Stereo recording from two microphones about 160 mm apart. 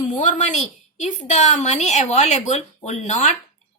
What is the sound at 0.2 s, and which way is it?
Speech, 50° left (ahead or behind).